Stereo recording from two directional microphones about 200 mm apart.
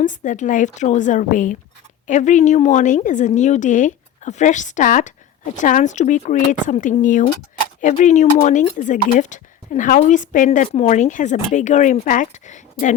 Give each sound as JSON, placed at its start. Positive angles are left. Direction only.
{"t": 0.0, "sound": "speech", "side_deg": 40}